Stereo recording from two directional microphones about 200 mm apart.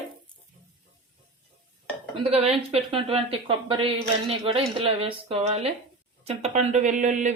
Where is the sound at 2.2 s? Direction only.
30° right (ahead or behind).